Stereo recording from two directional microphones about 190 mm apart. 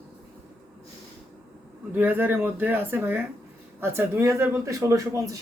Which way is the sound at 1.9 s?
10° right (ahead or behind).